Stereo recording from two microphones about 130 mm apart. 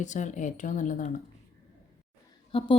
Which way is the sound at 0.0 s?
70° left (ahead or behind).